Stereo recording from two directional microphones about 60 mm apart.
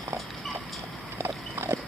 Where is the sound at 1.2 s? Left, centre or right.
Right.